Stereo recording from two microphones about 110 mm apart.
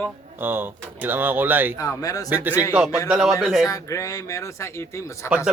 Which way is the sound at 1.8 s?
30° left (ahead or behind).